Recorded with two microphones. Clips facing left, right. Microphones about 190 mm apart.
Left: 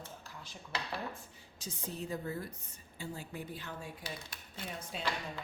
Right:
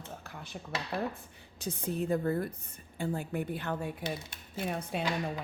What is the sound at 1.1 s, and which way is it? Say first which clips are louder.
A woman's voice: right 1 dB; 60° right (ahead or behind).